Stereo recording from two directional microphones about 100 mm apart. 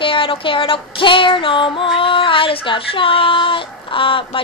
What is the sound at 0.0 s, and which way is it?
Female singing, 60° left (ahead or behind).